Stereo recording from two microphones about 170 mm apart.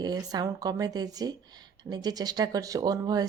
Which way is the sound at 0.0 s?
20° right (ahead or behind).